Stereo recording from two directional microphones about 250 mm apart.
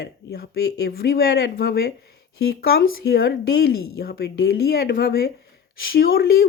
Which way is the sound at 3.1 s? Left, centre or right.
Left.